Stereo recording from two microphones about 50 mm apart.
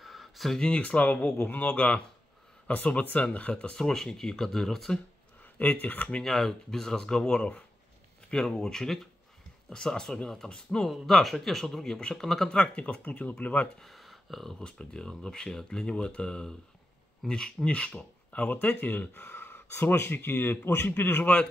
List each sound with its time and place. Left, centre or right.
0.0 s a sound: centre
0.6 s speech: left
5.6 s speech: left
6.0 s speech: centre; by 13.7 s left
13.7 s speech: centre
14.6 s speech: centre
17.6 s speech: left